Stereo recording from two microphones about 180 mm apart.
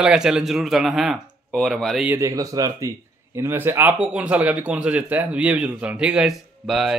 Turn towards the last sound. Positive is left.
turn(degrees=0)  # may be behind; listen again after turning